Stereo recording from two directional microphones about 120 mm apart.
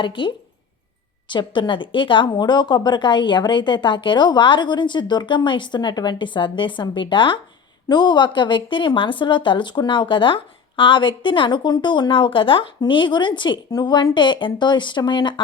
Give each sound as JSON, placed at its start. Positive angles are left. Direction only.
{"t": 0.0, "sound": "a woman's voice", "side_deg": 45}